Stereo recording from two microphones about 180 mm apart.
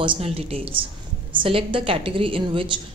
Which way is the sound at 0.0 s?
30° right (ahead or behind).